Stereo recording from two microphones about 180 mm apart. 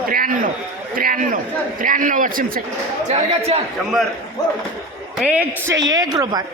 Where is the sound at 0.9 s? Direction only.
50° right (ahead or behind).